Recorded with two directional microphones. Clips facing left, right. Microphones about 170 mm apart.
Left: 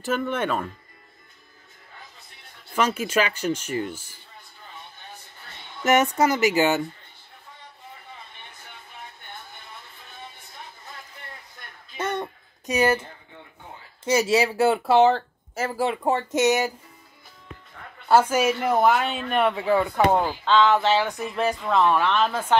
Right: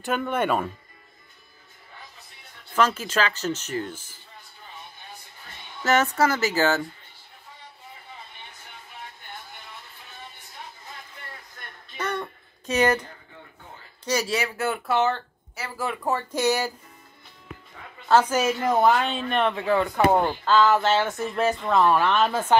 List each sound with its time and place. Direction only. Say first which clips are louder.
0.0 s speech: even; centre (ahead or behind)
2.7 s speech: even; 10° left (ahead or behind)
5.9 s speech: left 2 dB; 15° left (ahead or behind)
12.0 s a sound: left 2 dB; 20° left (ahead or behind)
14.0 s speech: left 5 dB; 25° left (ahead or behind)
15.1 s a sound: left 9 dB; 45° left (ahead or behind)
15.8 s speech: left 3 dB; 30° left (ahead or behind)
18.3 s speech: left 1 dB; 10° left (ahead or behind)
20.0 s speech: even; centre (ahead or behind)